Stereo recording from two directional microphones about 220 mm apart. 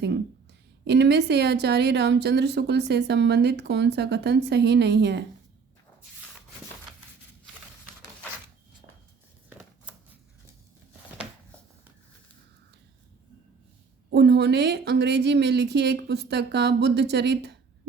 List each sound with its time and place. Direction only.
0.9 s speech: 50° right (ahead or behind)
9.5 s scissors: 10° right (ahead or behind)
14.1 s speech: 50° right (ahead or behind)